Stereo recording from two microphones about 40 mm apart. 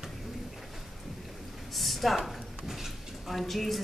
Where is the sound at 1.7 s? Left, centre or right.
Centre.